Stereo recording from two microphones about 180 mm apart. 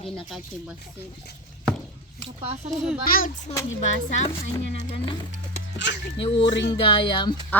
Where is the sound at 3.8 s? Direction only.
40° left (ahead or behind).